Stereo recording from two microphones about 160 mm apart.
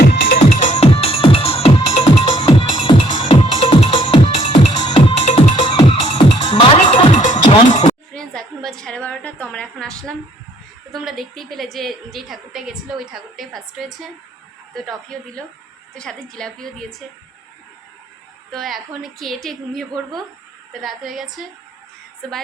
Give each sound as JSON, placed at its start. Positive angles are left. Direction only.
{"t": 0.0, "sound": "music", "side_deg": 75}
{"t": 0.3, "sound": "music", "side_deg": 45}
{"t": 8.1, "sound": "a sound", "side_deg": 5}
{"t": 10.9, "sound": "a woman's voice", "side_deg": 0}
{"t": 16.0, "sound": "a woman's voice", "side_deg": 5}
{"t": 18.5, "sound": "a woman's voice", "side_deg": 0}
{"t": 20.8, "sound": "a woman's voice", "side_deg": 0}